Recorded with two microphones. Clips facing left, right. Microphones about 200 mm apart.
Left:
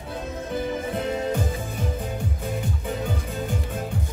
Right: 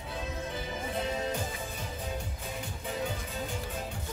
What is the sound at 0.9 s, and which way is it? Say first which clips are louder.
Music: left 4 dB; 55° left (ahead or behind).